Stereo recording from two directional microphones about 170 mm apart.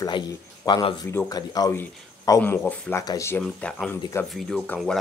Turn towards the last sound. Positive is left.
turn(degrees=0)  # may be behind; listen again after turning